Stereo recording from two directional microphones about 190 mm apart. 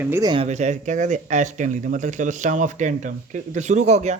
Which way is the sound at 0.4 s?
40° right (ahead or behind).